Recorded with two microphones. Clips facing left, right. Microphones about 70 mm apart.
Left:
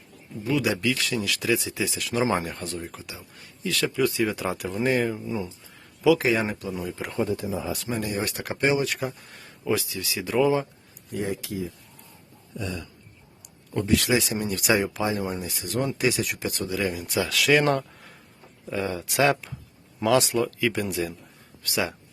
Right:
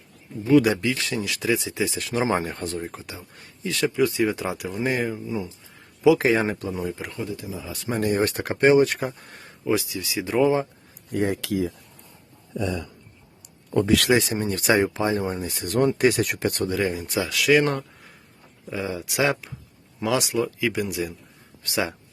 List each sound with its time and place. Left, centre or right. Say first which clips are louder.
0.5 s speech: right 8 dB; right
0.9 s speech: even; right
4.4 s speech: left 1 dB; centre
6.0 s speech: right 2 dB; right
7.2 s speech: left 5 dB; left
7.9 s speech: right 10 dB; right
9.6 s speech: right 2 dB; centre
11.1 s speech: right 5 dB; right
14.1 s speech: right 3 dB; right
16.7 s speech: right 2 dB; right
17.2 s speech: right 1 dB; centre
21.6 s speech: right 1 dB; right